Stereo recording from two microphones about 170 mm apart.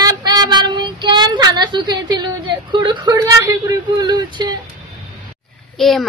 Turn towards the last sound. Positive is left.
turn(degrees=0)  # may be behind; listen again after turning